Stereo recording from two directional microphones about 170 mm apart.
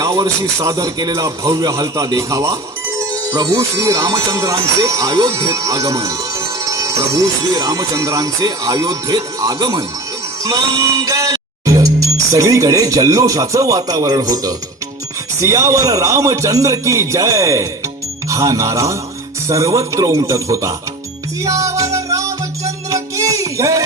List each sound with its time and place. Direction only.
0.0 s music: 20° right (ahead or behind)
15.4 s speech: 15° right (ahead or behind)
19.5 s music: 20° right (ahead or behind)